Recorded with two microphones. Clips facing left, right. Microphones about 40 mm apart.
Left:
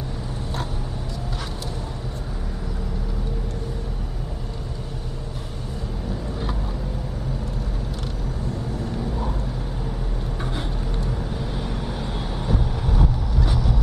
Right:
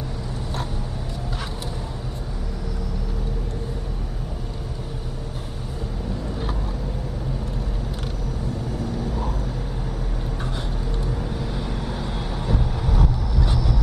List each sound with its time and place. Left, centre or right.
11.1 s vehicle: centre
13.0 s vehicle: centre